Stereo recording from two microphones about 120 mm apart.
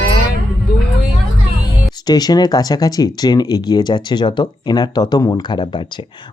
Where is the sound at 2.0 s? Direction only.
35° left (ahead or behind).